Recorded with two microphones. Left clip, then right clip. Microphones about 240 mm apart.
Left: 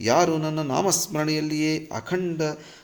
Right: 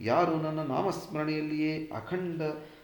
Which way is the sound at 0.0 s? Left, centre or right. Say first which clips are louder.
Left 6 dB; left.